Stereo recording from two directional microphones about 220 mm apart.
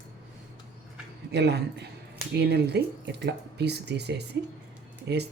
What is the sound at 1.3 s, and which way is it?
Speech, 50° right (ahead or behind).